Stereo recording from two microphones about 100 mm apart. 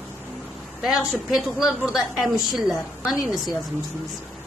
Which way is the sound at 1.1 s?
5° right (ahead or behind).